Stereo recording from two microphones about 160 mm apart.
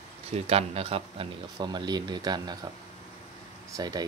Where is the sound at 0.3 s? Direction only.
40° right (ahead or behind).